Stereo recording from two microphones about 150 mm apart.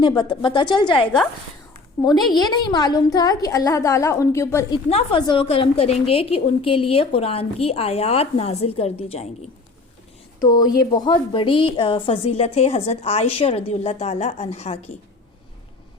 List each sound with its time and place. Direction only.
0.0 s a woman's voice: 30° left (ahead or behind)
2.3 s a woman's voice: 30° left (ahead or behind)
4.9 s a woman's voice: 45° left (ahead or behind)
10.5 s a woman's voice: 25° left (ahead or behind); by 14.8 s 45° left (ahead or behind)